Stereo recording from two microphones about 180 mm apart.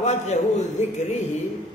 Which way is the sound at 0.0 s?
40° left (ahead or behind).